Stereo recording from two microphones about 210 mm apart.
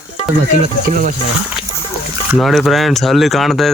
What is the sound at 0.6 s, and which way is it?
Speech, 35° right (ahead or behind).